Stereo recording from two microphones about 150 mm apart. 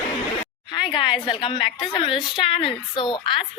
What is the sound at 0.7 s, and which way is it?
A woman's voice, 30° left (ahead or behind).